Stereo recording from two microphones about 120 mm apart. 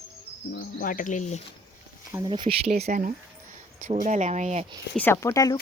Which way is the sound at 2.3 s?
45° right (ahead or behind).